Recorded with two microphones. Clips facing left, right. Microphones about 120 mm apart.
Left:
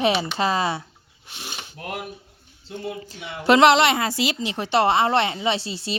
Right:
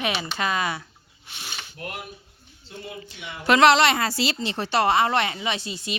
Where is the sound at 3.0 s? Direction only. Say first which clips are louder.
Left 3 dB; 40° left (ahead or behind).